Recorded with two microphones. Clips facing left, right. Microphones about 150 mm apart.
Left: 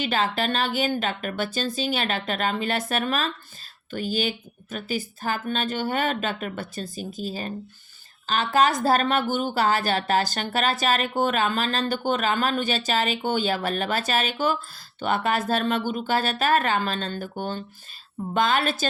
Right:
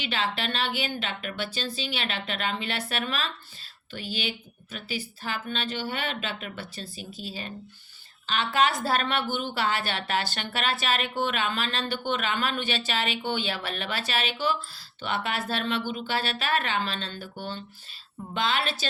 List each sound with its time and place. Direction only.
0.0 s a woman's voice: 45° left (ahead or behind)